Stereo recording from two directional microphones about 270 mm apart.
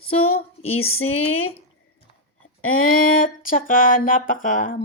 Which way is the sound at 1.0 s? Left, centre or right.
Left.